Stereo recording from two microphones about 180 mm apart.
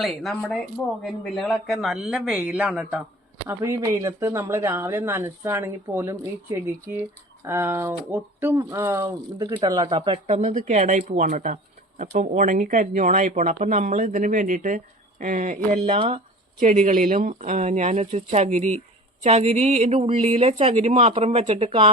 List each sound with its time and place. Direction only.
0.0 s speech: centre (ahead or behind); by 21.9 s 30° right (ahead or behind)